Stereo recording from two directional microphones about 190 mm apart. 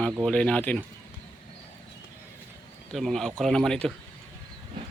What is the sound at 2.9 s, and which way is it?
Speech, centre (ahead or behind).